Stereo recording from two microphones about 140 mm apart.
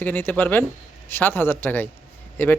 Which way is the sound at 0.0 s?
15° left (ahead or behind).